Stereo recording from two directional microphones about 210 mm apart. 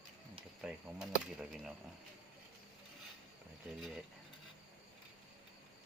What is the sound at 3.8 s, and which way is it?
Speech, centre (ahead or behind).